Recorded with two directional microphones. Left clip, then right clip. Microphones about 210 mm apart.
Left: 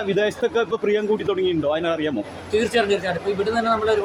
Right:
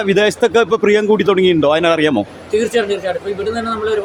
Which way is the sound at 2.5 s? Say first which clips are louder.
Right 4 dB; centre (ahead or behind).